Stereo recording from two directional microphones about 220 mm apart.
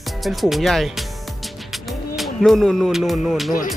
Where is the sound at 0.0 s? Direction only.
Centre (ahead or behind).